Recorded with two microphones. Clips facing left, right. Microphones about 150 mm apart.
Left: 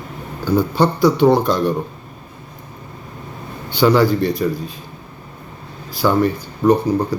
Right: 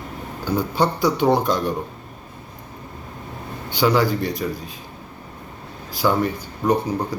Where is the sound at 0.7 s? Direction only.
15° right (ahead or behind).